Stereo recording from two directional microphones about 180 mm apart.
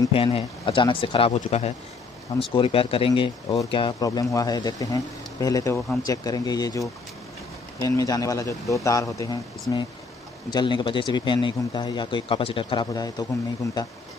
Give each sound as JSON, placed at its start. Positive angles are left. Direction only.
{"t": 0.1, "sound": "speech", "side_deg": 30}